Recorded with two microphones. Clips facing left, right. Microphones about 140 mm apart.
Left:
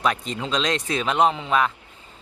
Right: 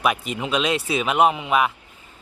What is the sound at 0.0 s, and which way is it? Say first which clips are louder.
Speech: right 1 dB; 10° right (ahead or behind).